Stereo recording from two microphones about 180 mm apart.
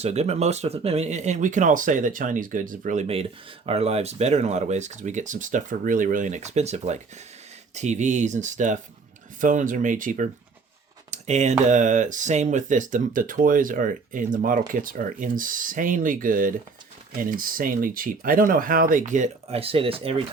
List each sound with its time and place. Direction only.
0.0 s speech: 35° right (ahead or behind)